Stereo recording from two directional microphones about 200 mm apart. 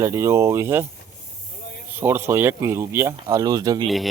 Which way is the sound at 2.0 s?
10° right (ahead or behind).